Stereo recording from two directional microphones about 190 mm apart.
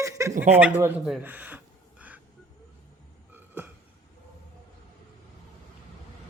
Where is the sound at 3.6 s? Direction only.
10° right (ahead or behind).